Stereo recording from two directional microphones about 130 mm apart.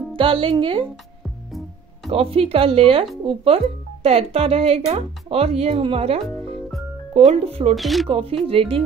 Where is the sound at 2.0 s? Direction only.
50° right (ahead or behind).